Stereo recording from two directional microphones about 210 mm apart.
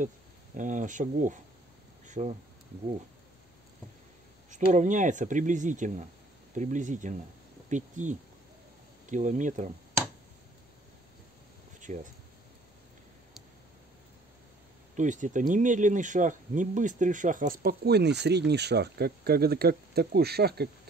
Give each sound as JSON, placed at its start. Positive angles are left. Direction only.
{"t": 0.6, "sound": "speech", "side_deg": -35}
{"t": 2.0, "sound": "a sound", "side_deg": -35}
{"t": 4.5, "sound": "speech", "side_deg": -35}
{"t": 11.8, "sound": "speech", "side_deg": -35}
{"t": 15.0, "sound": "speech", "side_deg": -35}